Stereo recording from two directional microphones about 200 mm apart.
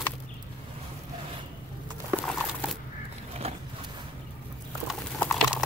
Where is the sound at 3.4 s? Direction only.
30° right (ahead or behind).